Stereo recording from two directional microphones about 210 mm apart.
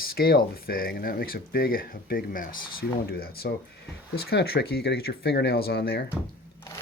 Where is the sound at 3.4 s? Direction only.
50° left (ahead or behind).